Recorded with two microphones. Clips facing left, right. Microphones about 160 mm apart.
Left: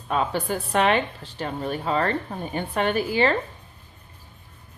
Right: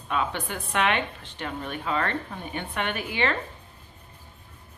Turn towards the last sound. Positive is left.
turn(degrees=35)  # may be behind; listen again after turning